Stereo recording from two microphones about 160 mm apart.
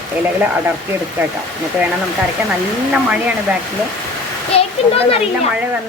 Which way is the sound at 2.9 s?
5° right (ahead or behind).